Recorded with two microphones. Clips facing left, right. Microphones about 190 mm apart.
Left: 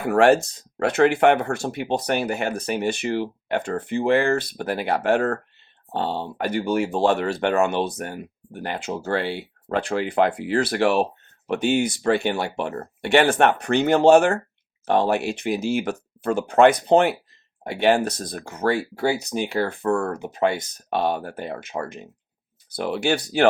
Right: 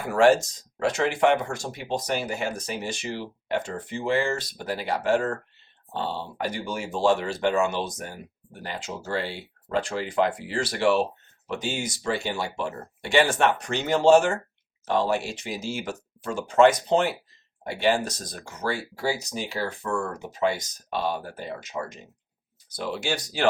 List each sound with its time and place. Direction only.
0.1 s speech: 60° left (ahead or behind)